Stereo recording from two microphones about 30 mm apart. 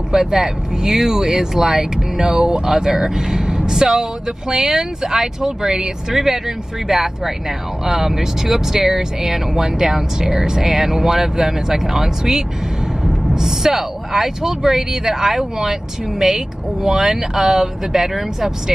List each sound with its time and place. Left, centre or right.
0.1 s speech: centre